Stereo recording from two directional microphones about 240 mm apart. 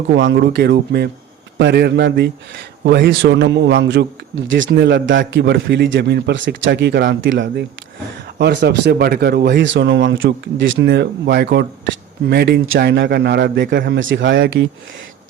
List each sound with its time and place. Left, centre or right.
0.2 s speech: right